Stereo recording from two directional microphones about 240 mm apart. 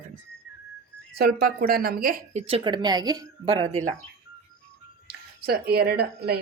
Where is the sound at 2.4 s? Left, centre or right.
Right.